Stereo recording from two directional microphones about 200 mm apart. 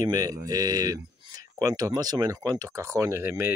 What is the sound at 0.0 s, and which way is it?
Speech, 15° right (ahead or behind).